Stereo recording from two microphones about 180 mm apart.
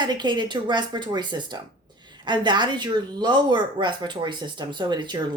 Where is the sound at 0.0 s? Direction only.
25° right (ahead or behind).